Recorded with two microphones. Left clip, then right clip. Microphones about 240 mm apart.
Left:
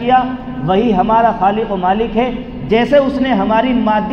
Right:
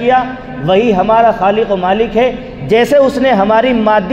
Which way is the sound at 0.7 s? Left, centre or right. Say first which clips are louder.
Right 3 dB; right.